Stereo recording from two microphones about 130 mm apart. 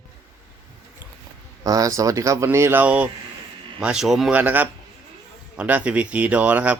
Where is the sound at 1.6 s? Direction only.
25° right (ahead or behind).